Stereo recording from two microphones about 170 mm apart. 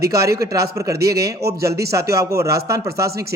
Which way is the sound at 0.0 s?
20° right (ahead or behind).